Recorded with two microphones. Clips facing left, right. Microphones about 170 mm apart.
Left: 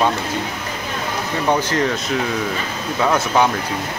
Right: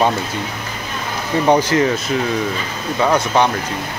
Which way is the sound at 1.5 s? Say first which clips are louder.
Right 4 dB; 10° right (ahead or behind).